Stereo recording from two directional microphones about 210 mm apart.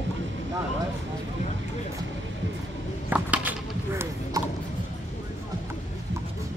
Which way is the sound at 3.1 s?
10° right (ahead or behind).